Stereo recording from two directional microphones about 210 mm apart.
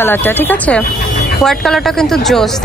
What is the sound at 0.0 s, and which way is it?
Speech, 10° left (ahead or behind).